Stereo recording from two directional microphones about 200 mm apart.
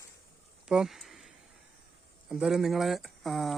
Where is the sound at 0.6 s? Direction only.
5° right (ahead or behind).